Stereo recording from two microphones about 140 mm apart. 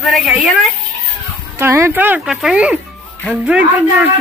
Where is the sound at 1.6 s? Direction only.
20° right (ahead or behind).